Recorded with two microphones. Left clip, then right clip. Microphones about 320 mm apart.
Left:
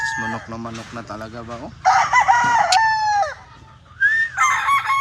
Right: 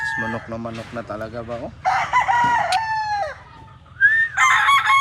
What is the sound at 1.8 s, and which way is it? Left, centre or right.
Chicken, centre.